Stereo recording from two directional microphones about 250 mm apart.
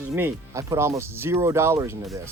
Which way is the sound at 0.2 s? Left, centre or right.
Centre.